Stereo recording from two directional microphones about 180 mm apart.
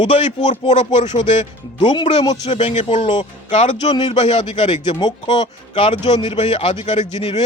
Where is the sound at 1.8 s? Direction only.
25° left (ahead or behind).